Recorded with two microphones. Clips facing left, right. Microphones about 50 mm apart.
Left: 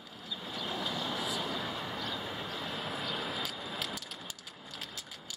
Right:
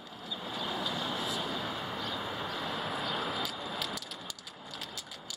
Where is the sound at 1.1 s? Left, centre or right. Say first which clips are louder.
Right 1 dB; centre.